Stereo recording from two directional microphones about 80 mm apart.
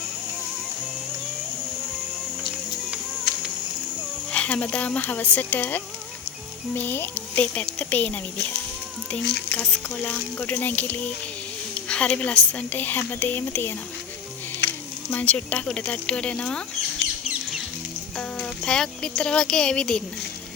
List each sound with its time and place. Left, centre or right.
4.3 s a woman's voice: centre
15.1 s speech: centre
18.2 s speech: centre